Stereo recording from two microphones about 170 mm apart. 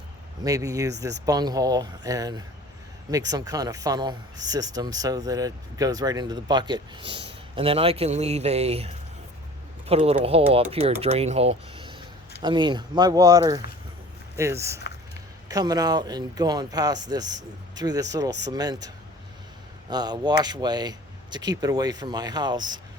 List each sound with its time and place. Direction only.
0.4 s speech: 20° right (ahead or behind)
18.3 s speech: 90° right
18.5 s speech: 25° right (ahead or behind)
19.9 s speech: 25° right (ahead or behind)